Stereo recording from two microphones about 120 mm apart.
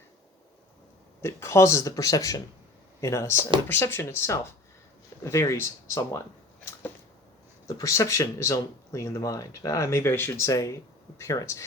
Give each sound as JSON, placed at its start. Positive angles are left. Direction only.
{"t": 1.2, "sound": "speech", "side_deg": 25}
{"t": 7.8, "sound": "speech", "side_deg": 25}